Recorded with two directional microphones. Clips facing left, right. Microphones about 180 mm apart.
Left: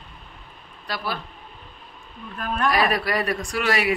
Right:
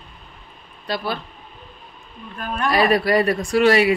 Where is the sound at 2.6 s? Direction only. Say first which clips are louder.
Right 5 dB; 25° right (ahead or behind).